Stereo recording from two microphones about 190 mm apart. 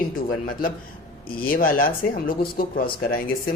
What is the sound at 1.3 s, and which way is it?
Speech, 50° left (ahead or behind).